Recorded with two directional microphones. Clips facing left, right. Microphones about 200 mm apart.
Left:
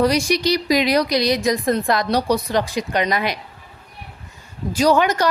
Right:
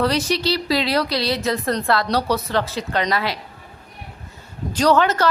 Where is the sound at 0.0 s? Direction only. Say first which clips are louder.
Left 2 dB; 10° left (ahead or behind).